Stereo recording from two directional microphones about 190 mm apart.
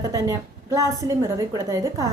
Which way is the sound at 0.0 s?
20° right (ahead or behind).